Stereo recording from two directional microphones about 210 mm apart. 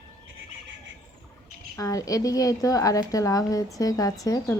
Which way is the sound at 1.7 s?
15° left (ahead or behind).